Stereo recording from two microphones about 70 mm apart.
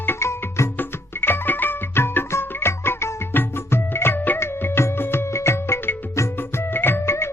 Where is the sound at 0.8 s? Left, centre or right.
Left.